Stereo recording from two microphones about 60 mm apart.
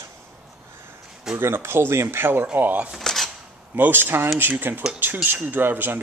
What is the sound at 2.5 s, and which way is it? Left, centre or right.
Speech, right.